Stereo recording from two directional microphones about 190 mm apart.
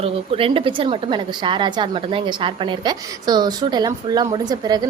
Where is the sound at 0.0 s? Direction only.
30° right (ahead or behind).